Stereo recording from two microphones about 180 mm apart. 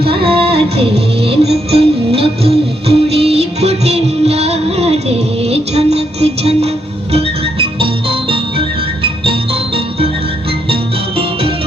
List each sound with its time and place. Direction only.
0.3 s music: 30° right (ahead or behind)